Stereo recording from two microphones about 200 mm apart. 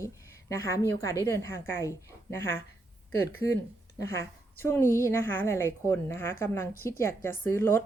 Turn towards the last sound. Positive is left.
turn(degrees=10)  # may be behind; listen again after turning